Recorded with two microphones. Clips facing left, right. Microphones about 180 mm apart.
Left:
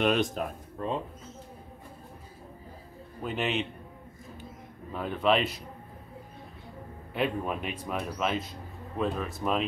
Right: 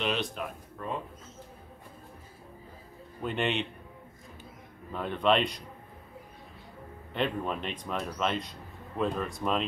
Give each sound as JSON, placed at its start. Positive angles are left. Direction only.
{"t": 0.0, "sound": "speech", "side_deg": 45}
{"t": 0.7, "sound": "speech", "side_deg": 30}
{"t": 3.2, "sound": "a man's voice", "side_deg": 0}
{"t": 4.9, "sound": "a man's voice", "side_deg": 5}
{"t": 7.2, "sound": "a man's voice", "side_deg": 5}